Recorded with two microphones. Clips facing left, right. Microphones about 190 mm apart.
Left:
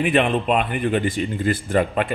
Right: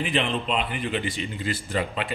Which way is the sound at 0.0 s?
60° left (ahead or behind).